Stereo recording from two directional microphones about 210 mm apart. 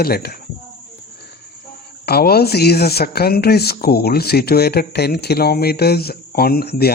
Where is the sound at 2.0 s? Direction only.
50° left (ahead or behind).